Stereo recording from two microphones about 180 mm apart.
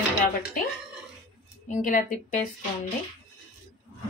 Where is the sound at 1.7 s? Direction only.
45° left (ahead or behind).